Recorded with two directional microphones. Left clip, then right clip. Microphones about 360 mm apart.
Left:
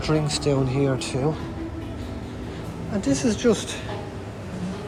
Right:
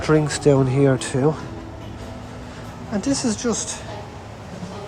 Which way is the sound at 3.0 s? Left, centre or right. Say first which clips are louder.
Right 1 dB; centre.